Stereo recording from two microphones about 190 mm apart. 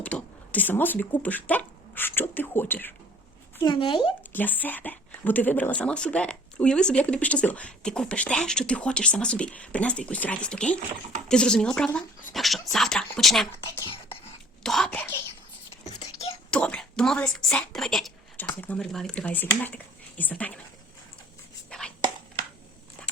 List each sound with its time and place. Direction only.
0.0 s speech: 10° left (ahead or behind)
3.6 s speech: 25° left (ahead or behind)
4.3 s a woman's voice: 10° left (ahead or behind)
14.6 s speech: centre (ahead or behind)
15.9 s a sound: 35° left (ahead or behind)
16.5 s a woman's voice: 5° left (ahead or behind)
21.7 s chopping: 5° left (ahead or behind)